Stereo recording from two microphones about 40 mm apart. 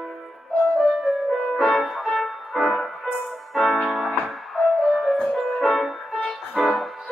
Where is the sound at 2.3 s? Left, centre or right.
Centre.